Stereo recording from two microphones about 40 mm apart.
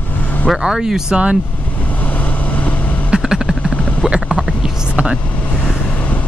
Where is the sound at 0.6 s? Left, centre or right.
Right.